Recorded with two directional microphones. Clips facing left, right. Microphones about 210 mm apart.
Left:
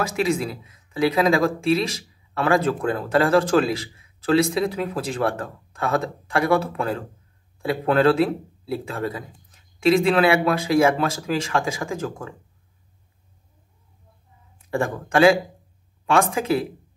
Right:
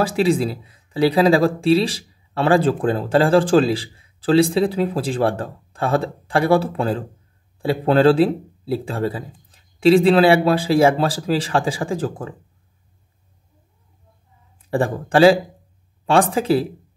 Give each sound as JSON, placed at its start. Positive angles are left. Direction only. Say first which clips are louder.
{"t": 0.0, "sound": "speech", "louder": "right 5 dB", "side_deg": -30}
{"t": 14.7, "sound": "speech", "louder": "right 4 dB", "side_deg": -30}